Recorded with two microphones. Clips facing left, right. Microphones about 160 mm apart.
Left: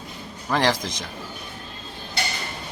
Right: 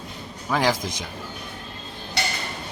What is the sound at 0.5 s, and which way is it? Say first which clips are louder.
Speech: even; 5° right (ahead or behind).